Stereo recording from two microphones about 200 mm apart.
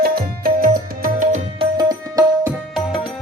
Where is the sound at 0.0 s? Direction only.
45° right (ahead or behind).